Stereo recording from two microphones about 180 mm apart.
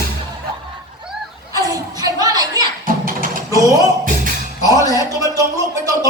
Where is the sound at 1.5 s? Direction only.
20° right (ahead or behind).